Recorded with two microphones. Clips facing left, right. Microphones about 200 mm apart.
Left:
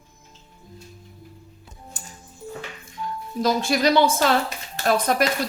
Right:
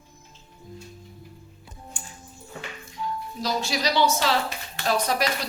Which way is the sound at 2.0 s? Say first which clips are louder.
Even; 40° left (ahead or behind).